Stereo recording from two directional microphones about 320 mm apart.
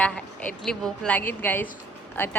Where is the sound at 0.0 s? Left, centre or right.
Centre.